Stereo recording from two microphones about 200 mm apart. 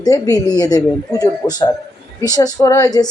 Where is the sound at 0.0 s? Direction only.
15° left (ahead or behind).